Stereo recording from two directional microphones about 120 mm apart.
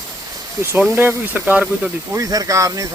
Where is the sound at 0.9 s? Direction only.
20° right (ahead or behind).